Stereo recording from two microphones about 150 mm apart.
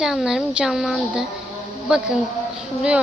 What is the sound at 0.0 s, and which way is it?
Speech, 5° right (ahead or behind).